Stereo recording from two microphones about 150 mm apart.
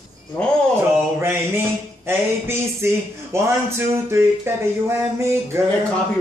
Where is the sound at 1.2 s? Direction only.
15° right (ahead or behind).